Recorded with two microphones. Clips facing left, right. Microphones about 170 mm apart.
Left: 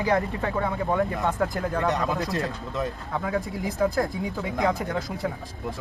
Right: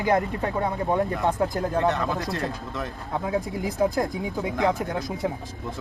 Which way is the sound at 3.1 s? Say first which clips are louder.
Right 2 dB; 20° right (ahead or behind).